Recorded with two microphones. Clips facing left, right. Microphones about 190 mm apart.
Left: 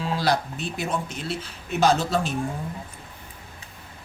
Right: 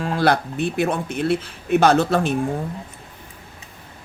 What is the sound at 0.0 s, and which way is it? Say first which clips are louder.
Speech: right 5 dB; 55° right (ahead or behind).